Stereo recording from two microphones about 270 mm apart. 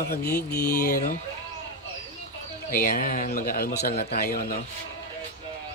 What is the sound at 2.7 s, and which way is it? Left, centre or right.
Speech, left.